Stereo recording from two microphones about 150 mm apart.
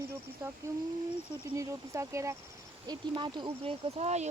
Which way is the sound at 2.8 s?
30° right (ahead or behind).